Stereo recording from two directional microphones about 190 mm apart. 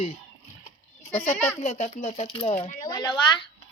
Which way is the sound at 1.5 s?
35° left (ahead or behind).